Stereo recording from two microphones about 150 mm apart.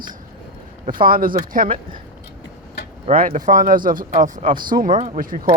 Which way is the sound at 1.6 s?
35° right (ahead or behind).